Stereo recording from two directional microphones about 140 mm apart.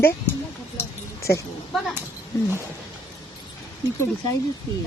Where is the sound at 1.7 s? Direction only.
Centre (ahead or behind).